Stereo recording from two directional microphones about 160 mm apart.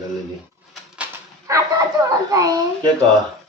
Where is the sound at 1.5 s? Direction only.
20° right (ahead or behind).